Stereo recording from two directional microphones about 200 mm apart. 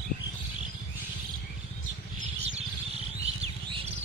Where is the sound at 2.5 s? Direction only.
30° right (ahead or behind).